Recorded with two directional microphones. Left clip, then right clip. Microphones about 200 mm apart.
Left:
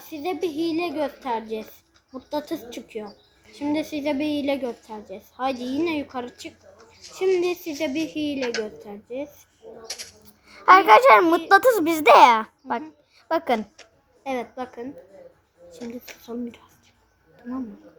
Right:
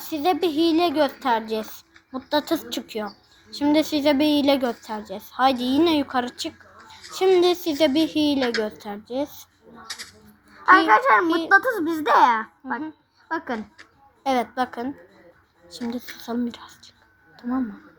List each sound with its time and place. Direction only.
0.0 s a child's voice: 30° right (ahead or behind)
9.8 s speech: 10° right (ahead or behind)
10.7 s a child's voice: 35° left (ahead or behind)
14.3 s a woman's voice: 30° right (ahead or behind)
16.2 s speech: 30° right (ahead or behind)